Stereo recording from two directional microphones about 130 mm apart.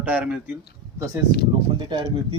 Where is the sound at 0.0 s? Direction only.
10° right (ahead or behind).